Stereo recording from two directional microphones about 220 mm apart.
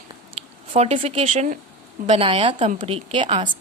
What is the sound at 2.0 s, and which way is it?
A woman's voice, 30° right (ahead or behind).